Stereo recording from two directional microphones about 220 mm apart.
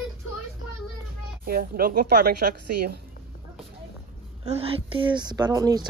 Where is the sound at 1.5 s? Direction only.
45° right (ahead or behind).